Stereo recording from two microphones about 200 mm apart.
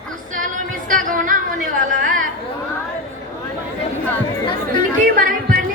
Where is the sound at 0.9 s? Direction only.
40° right (ahead or behind).